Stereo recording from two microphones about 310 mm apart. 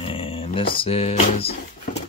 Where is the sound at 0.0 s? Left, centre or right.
Centre.